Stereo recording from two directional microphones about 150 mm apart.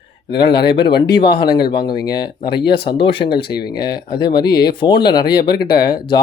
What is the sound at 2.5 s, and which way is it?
Speech, 90° left.